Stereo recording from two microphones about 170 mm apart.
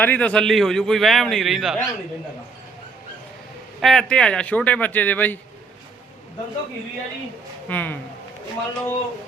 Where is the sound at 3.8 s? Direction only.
Centre (ahead or behind).